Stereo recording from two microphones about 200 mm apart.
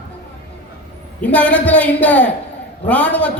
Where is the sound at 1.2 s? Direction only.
5° left (ahead or behind).